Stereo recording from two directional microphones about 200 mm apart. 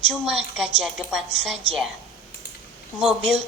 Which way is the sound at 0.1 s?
Centre (ahead or behind).